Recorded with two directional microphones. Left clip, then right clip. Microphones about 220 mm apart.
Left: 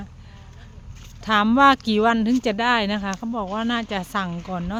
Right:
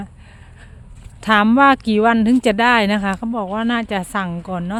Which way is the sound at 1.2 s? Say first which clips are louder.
Right 3 dB; 30° right (ahead or behind).